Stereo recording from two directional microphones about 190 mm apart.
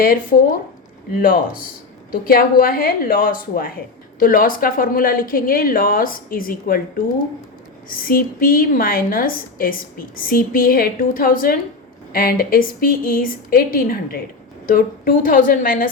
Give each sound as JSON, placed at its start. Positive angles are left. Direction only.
{"t": 0.0, "sound": "a woman's voice", "side_deg": 50}
{"t": 7.9, "sound": "a woman's voice", "side_deg": 50}